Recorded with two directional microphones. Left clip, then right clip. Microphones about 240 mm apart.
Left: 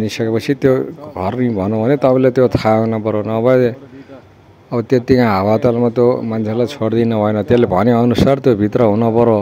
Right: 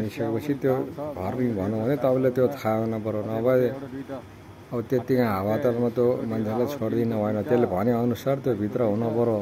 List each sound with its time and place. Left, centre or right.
0.1 s speech: left
4.7 s speech: left